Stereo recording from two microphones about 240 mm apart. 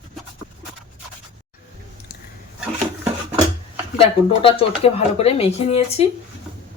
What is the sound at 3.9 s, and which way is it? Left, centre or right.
Speech, left.